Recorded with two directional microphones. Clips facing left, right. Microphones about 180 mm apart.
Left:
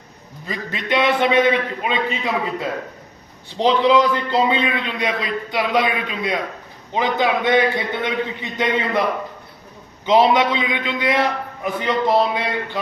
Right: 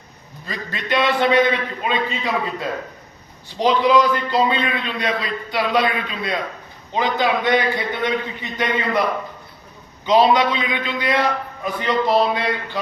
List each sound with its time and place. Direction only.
0.4 s a man's voice: 20° left (ahead or behind)
10.1 s a man's voice: 20° left (ahead or behind)